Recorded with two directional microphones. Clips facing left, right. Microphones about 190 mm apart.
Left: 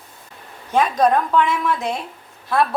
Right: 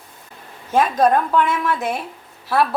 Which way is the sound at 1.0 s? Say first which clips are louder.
Even; 5° right (ahead or behind).